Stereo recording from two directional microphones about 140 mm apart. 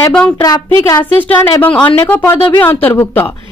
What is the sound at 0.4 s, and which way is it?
A child's voice, 25° left (ahead or behind).